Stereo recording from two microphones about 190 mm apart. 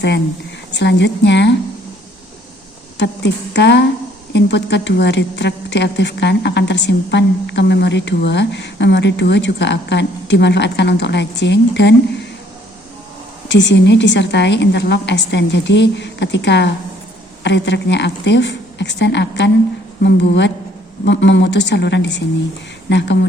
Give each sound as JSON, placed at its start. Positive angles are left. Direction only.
{"t": 0.7, "sound": "a woman's voice", "side_deg": 65}
{"t": 3.0, "sound": "a woman's voice", "side_deg": 65}
{"t": 13.5, "sound": "a woman's voice", "side_deg": 70}